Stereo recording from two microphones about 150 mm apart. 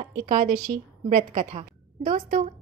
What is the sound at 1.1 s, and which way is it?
A woman's voice, 65° right (ahead or behind).